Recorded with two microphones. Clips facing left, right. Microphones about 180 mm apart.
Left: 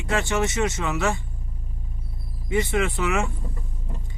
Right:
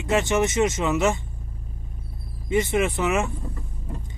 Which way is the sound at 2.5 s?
20° right (ahead or behind).